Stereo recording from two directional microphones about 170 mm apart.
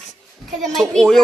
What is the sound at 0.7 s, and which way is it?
Speech, 5° left (ahead or behind).